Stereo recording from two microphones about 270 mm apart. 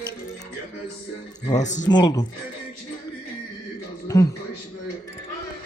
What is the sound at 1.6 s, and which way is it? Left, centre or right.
Speech, left.